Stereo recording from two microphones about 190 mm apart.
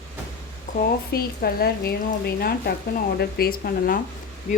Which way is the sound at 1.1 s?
55° left (ahead or behind).